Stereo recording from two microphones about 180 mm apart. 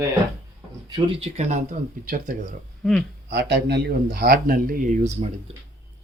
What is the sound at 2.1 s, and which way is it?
Speech, 50° right (ahead or behind).